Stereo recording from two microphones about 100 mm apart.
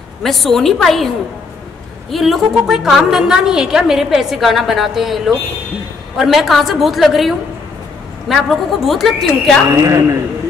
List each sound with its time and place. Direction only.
0.2 s a woman's voice: centre (ahead or behind)
9.7 s speech: 30° right (ahead or behind)